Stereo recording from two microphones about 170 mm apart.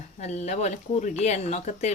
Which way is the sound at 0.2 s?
40° left (ahead or behind).